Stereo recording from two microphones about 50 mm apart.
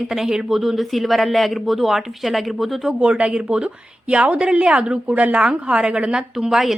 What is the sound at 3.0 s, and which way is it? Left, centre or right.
Speech, right.